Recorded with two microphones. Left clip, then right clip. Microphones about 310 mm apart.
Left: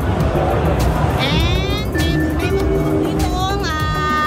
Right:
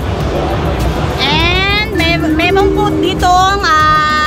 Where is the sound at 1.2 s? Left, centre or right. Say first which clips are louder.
Right 8 dB; centre.